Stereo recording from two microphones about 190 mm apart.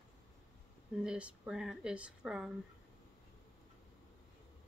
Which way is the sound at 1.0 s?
5° right (ahead or behind).